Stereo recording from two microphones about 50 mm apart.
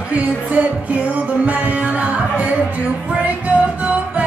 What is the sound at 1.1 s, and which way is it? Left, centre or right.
Music, right.